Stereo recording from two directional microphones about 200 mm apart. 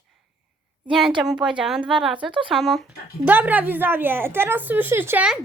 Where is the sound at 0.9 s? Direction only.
5° right (ahead or behind).